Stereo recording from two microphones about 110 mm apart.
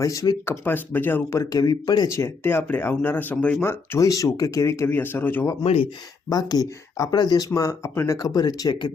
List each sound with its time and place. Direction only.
0.0 s speech: 30° left (ahead or behind)
0.6 s speech: 20° left (ahead or behind)
1.5 s speech: 35° left (ahead or behind)
2.0 s speech: 25° left (ahead or behind)
5.6 s speech: 60° left (ahead or behind)
6.3 s speech: 35° left (ahead or behind)